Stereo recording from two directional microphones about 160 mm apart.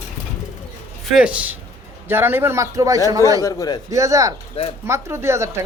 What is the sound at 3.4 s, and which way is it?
Speech, 20° left (ahead or behind).